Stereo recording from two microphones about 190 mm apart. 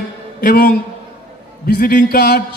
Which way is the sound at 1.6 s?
50° left (ahead or behind).